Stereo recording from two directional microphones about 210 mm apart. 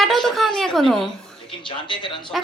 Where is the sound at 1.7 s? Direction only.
20° left (ahead or behind).